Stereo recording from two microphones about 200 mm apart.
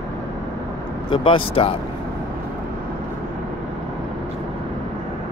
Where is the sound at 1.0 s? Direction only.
25° left (ahead or behind).